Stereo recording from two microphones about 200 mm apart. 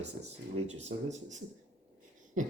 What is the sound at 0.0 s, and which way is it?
Speech, 35° right (ahead or behind).